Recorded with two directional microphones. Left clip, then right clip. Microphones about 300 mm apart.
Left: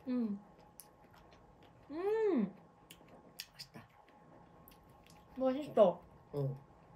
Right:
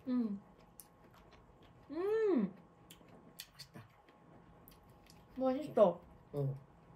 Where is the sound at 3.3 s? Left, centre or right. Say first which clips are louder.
Left 3 dB; centre.